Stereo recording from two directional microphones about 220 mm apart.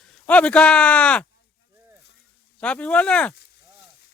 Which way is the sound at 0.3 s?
5° left (ahead or behind).